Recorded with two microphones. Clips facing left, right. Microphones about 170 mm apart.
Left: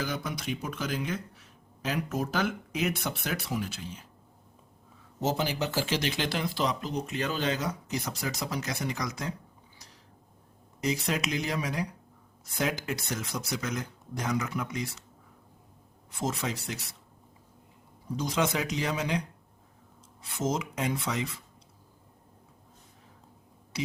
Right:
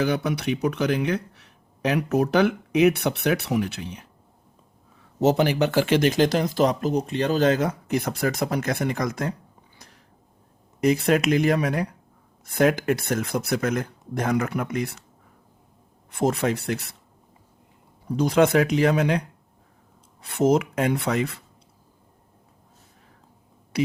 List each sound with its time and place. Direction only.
0.0 s speech: 65° right (ahead or behind)
5.2 s speech: 65° right (ahead or behind); by 7.0 s 45° right (ahead or behind)
7.1 s speech: 35° right (ahead or behind); by 9.3 s 55° right (ahead or behind)
10.8 s speech: 55° right (ahead or behind)
16.1 s speech: 60° right (ahead or behind)
18.2 s speech: 60° right (ahead or behind)
20.2 s speech: 60° right (ahead or behind)
23.7 s speech: 60° right (ahead or behind)